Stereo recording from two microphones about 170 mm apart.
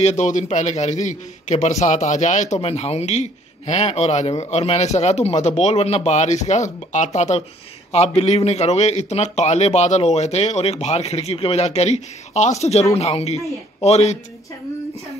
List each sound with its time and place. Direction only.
0.0 s a man's voice: 45° left (ahead or behind)